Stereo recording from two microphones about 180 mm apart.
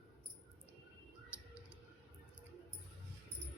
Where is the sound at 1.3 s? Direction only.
5° right (ahead or behind).